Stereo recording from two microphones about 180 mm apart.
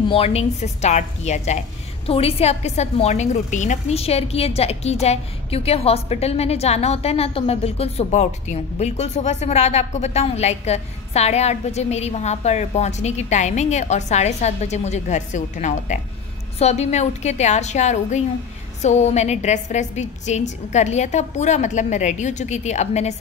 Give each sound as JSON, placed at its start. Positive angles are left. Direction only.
{"t": 0.1, "sound": "a woman's voice", "side_deg": 35}